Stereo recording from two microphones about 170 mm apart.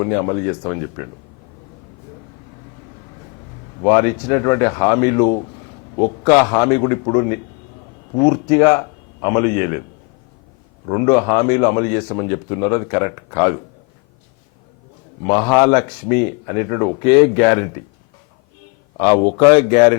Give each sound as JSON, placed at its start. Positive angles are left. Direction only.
{"t": 0.0, "sound": "a man's voice", "side_deg": 20}
{"t": 3.8, "sound": "a man's voice", "side_deg": 15}
{"t": 10.8, "sound": "a man's voice", "side_deg": 20}
{"t": 15.2, "sound": "speech", "side_deg": 20}
{"t": 18.9, "sound": "speech", "side_deg": 20}